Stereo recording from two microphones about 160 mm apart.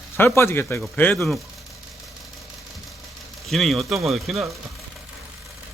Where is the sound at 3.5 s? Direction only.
Centre (ahead or behind).